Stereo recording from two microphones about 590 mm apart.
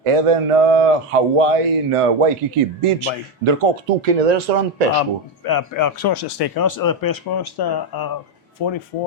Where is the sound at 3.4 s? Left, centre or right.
Right.